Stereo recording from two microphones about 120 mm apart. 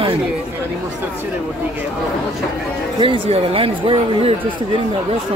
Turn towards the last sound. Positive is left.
turn(degrees=-50)  # may be behind; listen again after turning